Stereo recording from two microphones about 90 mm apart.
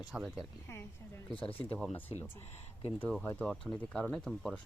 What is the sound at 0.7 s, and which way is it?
Speech, 30° left (ahead or behind).